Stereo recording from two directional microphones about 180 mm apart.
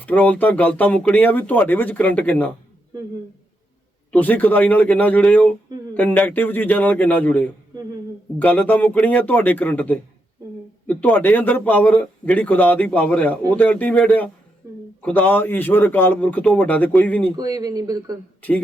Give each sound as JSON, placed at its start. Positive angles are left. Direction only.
{"t": 0.0, "sound": "speech", "side_deg": 10}
{"t": 4.1, "sound": "speech", "side_deg": 10}
{"t": 17.3, "sound": "speech", "side_deg": -20}